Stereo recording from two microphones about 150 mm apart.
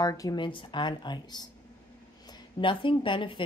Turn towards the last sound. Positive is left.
turn(degrees=35)  # may be behind; listen again after turning